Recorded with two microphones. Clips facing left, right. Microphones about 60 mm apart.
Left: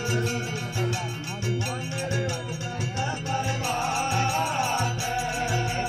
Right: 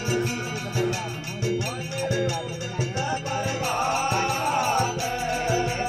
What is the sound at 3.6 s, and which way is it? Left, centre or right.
Music, right.